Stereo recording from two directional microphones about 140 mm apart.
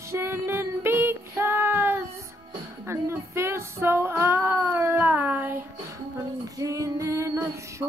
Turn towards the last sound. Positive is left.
turn(degrees=-20)  # may be behind; listen again after turning